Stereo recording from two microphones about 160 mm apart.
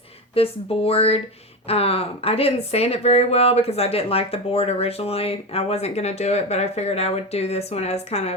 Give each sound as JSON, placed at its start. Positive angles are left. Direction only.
{"t": 0.3, "sound": "speech", "side_deg": 35}